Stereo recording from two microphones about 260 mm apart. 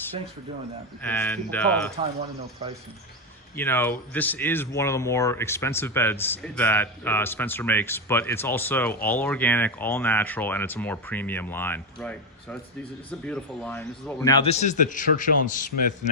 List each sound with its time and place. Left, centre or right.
1.0 s speech: centre
3.5 s a man's voice: centre; by 15.7 s left